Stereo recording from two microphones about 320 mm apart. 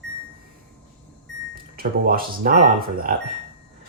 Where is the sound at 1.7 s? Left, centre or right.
Right.